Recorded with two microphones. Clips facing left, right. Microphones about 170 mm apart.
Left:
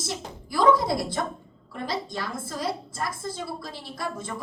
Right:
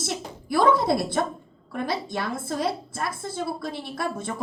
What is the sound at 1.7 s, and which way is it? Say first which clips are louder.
A woman's voice: right 3 dB; 60° right (ahead or behind).